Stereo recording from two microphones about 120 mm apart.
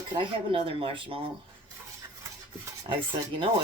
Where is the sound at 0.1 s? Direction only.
45° right (ahead or behind).